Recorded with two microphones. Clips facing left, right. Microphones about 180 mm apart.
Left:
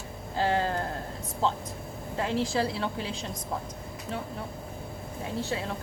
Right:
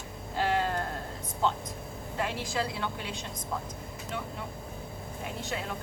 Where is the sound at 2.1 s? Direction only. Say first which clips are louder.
Left 5 dB; 30° left (ahead or behind).